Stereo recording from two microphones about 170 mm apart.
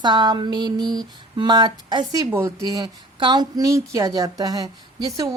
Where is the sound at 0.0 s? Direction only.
25° right (ahead or behind).